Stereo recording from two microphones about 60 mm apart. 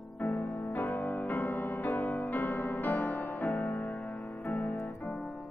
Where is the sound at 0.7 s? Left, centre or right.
Left.